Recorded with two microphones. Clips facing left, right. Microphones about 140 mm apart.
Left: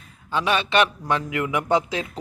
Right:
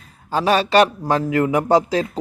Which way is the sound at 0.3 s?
40° right (ahead or behind).